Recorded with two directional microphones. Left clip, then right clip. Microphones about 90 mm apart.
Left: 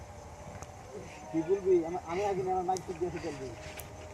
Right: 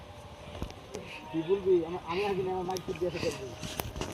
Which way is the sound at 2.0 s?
30° left (ahead or behind).